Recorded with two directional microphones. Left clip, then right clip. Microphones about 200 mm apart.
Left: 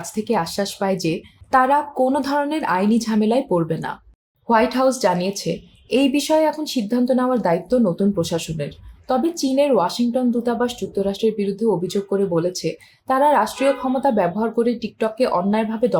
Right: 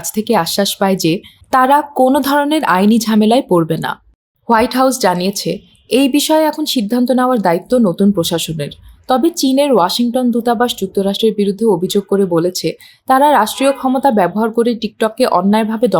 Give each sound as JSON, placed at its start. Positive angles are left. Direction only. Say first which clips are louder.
{"t": 0.0, "sound": "a woman's voice", "louder": "right 7 dB", "side_deg": -45}